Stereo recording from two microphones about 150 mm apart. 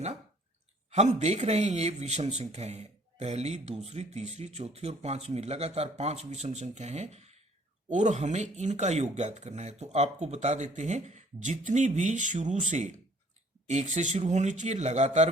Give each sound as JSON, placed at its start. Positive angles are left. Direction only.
{"t": 0.9, "sound": "a man's voice", "side_deg": -50}